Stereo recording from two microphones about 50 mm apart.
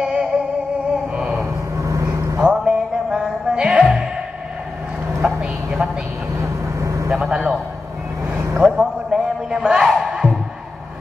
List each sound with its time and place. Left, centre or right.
0.0 s music: centre
1.1 s mantra: centre
1.8 s vehicle: right
2.4 s music: centre
5.2 s vehicle: centre
6.8 s vehicle: right
7.1 s a sound: centre
8.5 s a sound: centre
9.8 s music: centre